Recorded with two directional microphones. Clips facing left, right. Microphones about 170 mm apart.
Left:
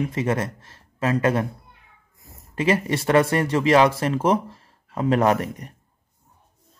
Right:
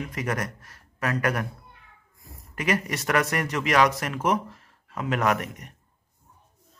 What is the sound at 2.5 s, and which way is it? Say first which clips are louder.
Speech: left 5 dB; 30° left (ahead or behind).